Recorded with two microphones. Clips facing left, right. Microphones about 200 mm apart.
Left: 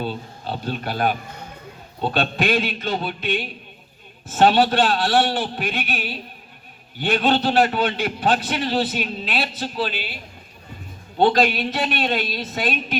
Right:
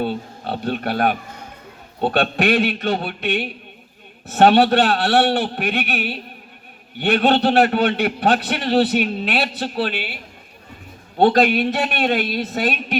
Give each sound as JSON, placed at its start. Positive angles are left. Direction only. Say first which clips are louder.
{"t": 0.0, "sound": "a man's voice", "louder": "right 4 dB", "side_deg": -65}
{"t": 11.3, "sound": "a man's voice", "louder": "right 4 dB", "side_deg": -55}